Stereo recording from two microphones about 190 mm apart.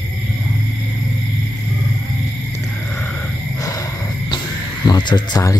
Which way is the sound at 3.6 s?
20° left (ahead or behind).